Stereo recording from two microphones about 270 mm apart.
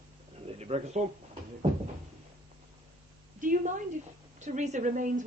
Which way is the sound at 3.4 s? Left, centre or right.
Right.